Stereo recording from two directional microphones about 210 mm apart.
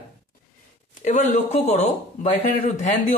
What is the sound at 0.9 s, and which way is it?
Speech, 35° left (ahead or behind).